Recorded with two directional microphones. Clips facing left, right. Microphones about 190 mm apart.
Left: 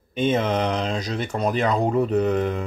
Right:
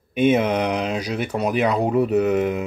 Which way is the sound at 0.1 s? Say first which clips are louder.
Right 4 dB; 10° right (ahead or behind).